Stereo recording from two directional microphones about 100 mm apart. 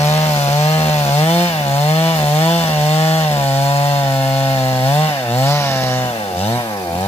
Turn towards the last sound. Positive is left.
turn(degrees=25)  # may be behind; listen again after turning